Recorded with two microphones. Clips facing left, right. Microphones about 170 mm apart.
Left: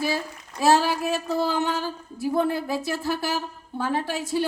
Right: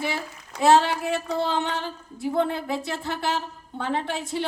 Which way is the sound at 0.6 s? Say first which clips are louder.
Right 1 dB; 20° right (ahead or behind).